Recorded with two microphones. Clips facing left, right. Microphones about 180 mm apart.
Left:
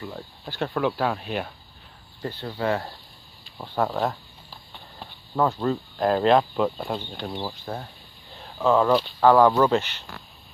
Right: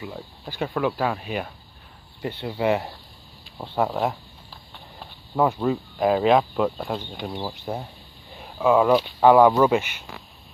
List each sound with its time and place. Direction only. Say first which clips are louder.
0.0 s speech: right 1 dB; 5° right (ahead or behind)
2.2 s speech: right 3 dB; 15° right (ahead or behind)
5.3 s speech: right 2 dB; 10° right (ahead or behind)
7.5 s speech: right 3 dB; 15° right (ahead or behind)
9.9 s speech: right 1 dB; centre (ahead or behind)